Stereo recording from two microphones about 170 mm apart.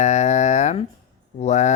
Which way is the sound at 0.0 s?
40° left (ahead or behind).